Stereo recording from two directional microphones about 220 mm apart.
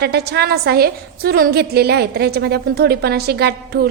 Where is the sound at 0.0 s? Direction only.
45° right (ahead or behind).